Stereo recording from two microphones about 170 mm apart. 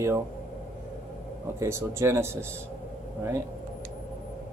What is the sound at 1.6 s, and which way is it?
Speech, 15° right (ahead or behind).